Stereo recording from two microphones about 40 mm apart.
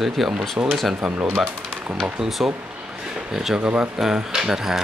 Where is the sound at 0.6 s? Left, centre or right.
Right.